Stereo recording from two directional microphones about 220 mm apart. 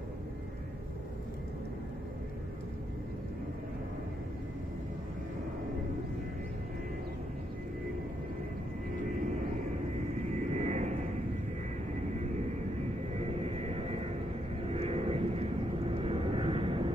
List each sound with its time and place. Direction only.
10.3 s vehicle: 30° right (ahead or behind)
13.2 s vehicle: 30° right (ahead or behind)